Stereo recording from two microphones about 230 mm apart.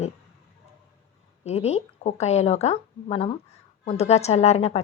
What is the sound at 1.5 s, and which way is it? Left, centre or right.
Speech, left.